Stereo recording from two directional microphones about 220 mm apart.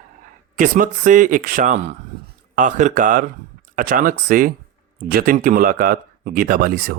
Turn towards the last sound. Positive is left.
turn(degrees=-45)  # may be behind; listen again after turning